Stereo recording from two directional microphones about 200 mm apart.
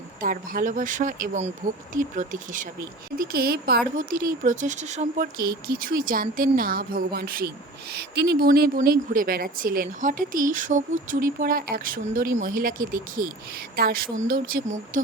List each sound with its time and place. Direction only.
0.2 s speech: 45° right (ahead or behind)